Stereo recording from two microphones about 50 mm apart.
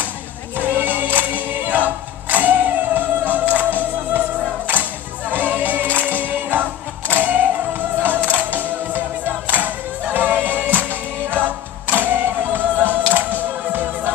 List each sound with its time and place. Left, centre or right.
0.6 s music: right
5.3 s music: right